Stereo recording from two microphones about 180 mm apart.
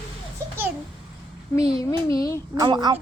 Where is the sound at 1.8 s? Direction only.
20° left (ahead or behind).